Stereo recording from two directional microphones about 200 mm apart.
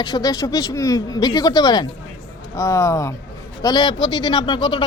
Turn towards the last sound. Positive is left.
turn(degrees=25)  # may be behind; listen again after turning